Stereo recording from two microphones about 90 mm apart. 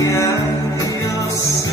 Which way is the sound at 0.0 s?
35° left (ahead or behind).